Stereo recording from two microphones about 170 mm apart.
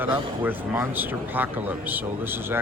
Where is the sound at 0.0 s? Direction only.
10° right (ahead or behind).